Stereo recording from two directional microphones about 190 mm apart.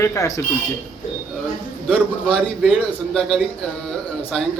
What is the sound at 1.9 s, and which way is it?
A man's voice, 5° right (ahead or behind).